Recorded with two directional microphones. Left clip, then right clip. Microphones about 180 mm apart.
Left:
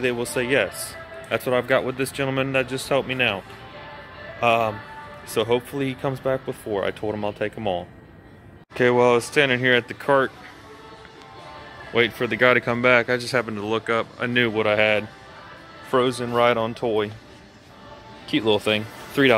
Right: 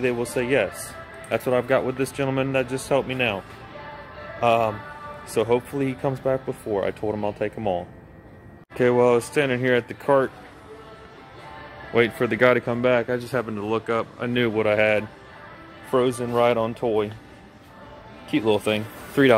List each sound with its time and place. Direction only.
0.0 s speech: 5° right (ahead or behind)
11.9 s speech: 20° right (ahead or behind)
12.5 s speech: 5° left (ahead or behind)
18.3 s speech: centre (ahead or behind)
19.2 s speech: 15° right (ahead or behind)